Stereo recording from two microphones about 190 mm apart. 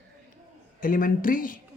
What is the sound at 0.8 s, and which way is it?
Speech, 45° left (ahead or behind).